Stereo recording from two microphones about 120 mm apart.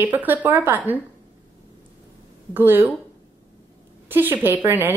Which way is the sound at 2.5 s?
15° right (ahead or behind).